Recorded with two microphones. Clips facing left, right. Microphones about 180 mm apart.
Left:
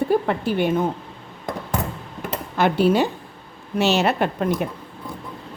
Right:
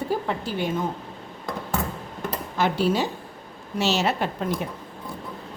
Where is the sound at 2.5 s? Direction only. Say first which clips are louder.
Left 5 dB; 60° left (ahead or behind).